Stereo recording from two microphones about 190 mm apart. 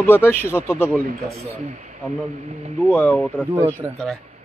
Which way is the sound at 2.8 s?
5° left (ahead or behind).